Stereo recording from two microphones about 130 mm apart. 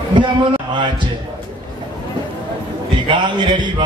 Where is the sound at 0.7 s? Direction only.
35° right (ahead or behind).